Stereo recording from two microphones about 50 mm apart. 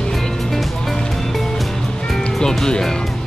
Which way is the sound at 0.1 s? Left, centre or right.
Centre.